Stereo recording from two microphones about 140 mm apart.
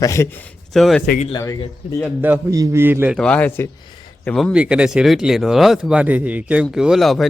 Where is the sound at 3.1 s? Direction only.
5° left (ahead or behind).